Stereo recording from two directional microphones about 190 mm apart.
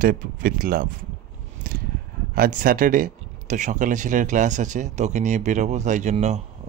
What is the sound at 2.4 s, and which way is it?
Speech, 45° right (ahead or behind).